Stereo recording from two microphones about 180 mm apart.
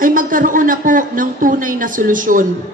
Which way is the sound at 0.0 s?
50° right (ahead or behind).